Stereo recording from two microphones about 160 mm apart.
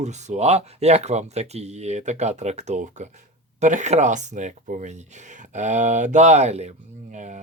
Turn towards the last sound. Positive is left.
turn(degrees=-50)  # may be behind; listen again after turning